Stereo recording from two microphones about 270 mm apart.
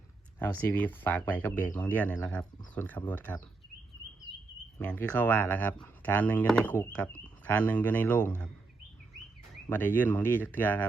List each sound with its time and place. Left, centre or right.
0.3 s speech: centre
4.8 s speech: centre
9.6 s speech: centre